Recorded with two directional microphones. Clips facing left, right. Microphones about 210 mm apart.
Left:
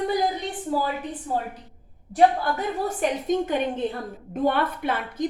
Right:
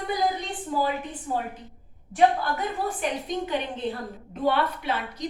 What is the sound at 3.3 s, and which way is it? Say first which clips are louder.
Speech: left 5 dB; 45° left (ahead or behind).